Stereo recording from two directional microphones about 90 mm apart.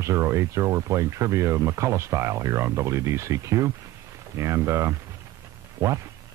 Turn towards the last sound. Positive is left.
turn(degrees=-35)  # may be behind; listen again after turning